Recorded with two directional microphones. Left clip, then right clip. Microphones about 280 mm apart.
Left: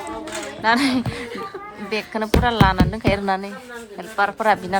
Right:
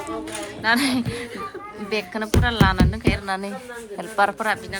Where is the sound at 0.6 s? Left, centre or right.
Centre.